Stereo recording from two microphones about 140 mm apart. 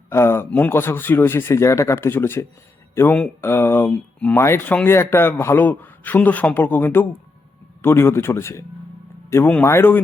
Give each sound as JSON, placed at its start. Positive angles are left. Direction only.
{"t": 0.1, "sound": "a man's voice", "side_deg": 15}